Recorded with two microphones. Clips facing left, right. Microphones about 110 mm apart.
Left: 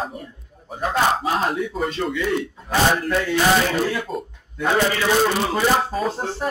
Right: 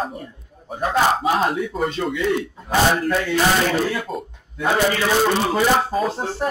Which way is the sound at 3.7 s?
Centre (ahead or behind).